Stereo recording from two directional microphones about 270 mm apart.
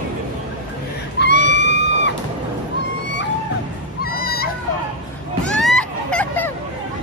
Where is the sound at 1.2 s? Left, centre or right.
Left.